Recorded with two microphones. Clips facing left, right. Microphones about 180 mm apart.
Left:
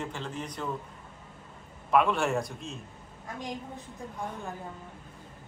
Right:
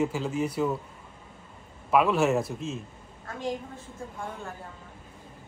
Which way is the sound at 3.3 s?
15° left (ahead or behind).